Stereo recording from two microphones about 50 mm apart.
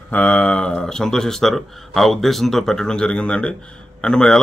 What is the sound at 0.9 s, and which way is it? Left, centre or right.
Speech, centre.